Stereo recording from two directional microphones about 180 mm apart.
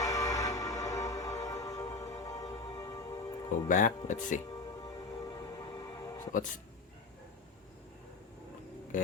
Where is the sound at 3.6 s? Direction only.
45° left (ahead or behind).